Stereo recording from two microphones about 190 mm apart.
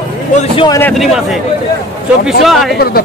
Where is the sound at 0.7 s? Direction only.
10° left (ahead or behind).